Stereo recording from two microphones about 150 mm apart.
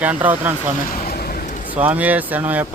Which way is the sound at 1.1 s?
80° left.